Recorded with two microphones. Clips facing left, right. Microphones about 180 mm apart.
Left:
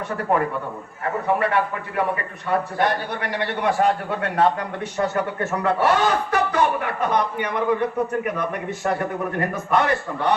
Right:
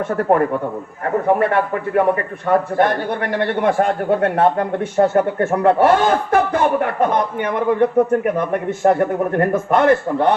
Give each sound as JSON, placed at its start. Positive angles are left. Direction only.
{"t": 1.0, "sound": "a man's voice", "side_deg": -50}